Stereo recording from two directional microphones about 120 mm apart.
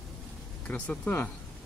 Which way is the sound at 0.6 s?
10° left (ahead or behind).